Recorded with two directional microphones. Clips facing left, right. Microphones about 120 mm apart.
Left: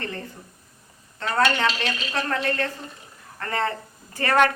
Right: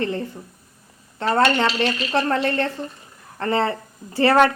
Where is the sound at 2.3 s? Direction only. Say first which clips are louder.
Right 4 dB; 30° right (ahead or behind).